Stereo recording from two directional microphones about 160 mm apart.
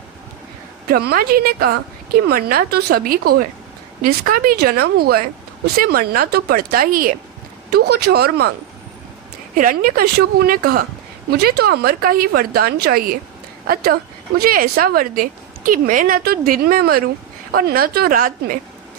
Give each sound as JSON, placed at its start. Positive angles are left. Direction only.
{"t": 0.9, "sound": "speech", "side_deg": -70}
{"t": 7.7, "sound": "speech", "side_deg": -85}
{"t": 9.6, "sound": "speech", "side_deg": -60}
{"t": 11.3, "sound": "speech", "side_deg": -80}